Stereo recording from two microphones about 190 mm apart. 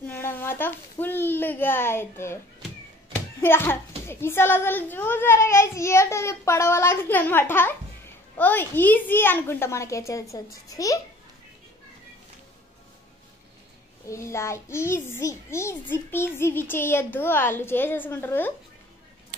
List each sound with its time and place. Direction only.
0.0 s a sound: 10° left (ahead or behind)
3.3 s a child's voice: 10° left (ahead or behind)
14.0 s a child's voice: 15° left (ahead or behind)